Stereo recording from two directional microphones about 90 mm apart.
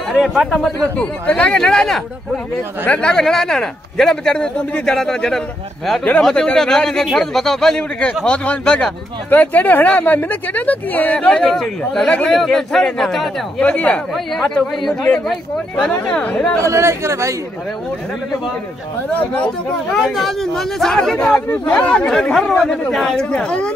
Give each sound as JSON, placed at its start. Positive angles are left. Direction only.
{"t": 0.2, "sound": "a man's voice", "side_deg": 0}
{"t": 13.6, "sound": "speech", "side_deg": 15}
{"t": 14.1, "sound": "a man's voice", "side_deg": 5}
{"t": 16.5, "sound": "speech", "side_deg": -35}
{"t": 19.1, "sound": "speech", "side_deg": 15}
{"t": 20.0, "sound": "a man's voice", "side_deg": 0}